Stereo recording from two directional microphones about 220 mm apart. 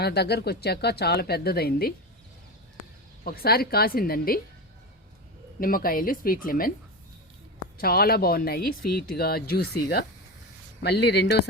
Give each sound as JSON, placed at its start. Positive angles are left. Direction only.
{"t": 0.0, "sound": "speech", "side_deg": 45}
{"t": 3.2, "sound": "speech", "side_deg": 45}
{"t": 5.5, "sound": "speech", "side_deg": 40}
{"t": 7.8, "sound": "speech", "side_deg": 45}